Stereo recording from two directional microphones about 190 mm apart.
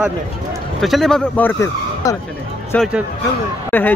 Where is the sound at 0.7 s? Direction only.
Centre (ahead or behind).